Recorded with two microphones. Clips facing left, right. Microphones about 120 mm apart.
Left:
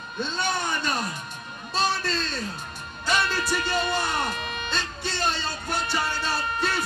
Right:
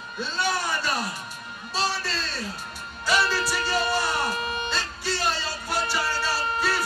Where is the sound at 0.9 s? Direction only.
5° right (ahead or behind).